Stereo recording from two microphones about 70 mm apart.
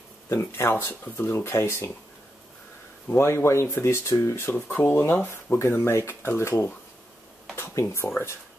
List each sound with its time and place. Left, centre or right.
0.3 s speech: left
3.1 s speech: left